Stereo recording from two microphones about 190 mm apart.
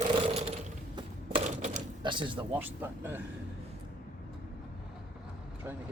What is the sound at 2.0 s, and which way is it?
Speech, 25° right (ahead or behind).